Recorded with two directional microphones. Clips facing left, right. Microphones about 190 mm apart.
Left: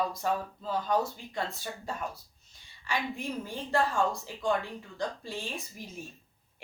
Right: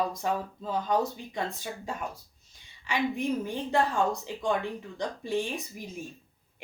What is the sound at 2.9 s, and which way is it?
Speech, 20° right (ahead or behind).